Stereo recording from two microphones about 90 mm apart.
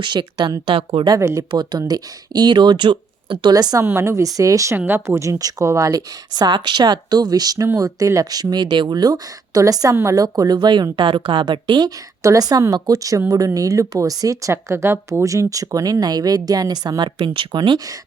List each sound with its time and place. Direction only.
0.0 s speech: 55° right (ahead or behind)
0.7 s a woman's voice: 90° right
1.2 s speech: 35° right (ahead or behind)
1.5 s speech: 55° right (ahead or behind)
3.5 s speech: 45° right (ahead or behind)
3.8 s speech: 35° right (ahead or behind)
6.3 s speech: 55° right (ahead or behind)
12.2 s speech: 40° right (ahead or behind); by 17.7 s 60° right (ahead or behind)